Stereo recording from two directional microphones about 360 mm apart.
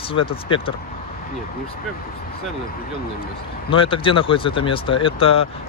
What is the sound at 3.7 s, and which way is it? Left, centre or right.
Speech, centre.